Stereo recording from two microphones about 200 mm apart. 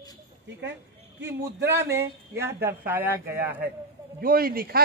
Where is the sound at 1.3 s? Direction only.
10° right (ahead or behind).